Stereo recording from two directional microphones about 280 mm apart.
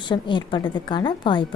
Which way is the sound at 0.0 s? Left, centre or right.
Centre.